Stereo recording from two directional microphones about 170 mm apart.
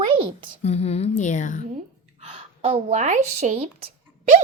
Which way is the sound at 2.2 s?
35° right (ahead or behind).